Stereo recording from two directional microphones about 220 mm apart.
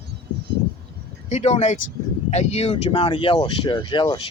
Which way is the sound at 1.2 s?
30° left (ahead or behind).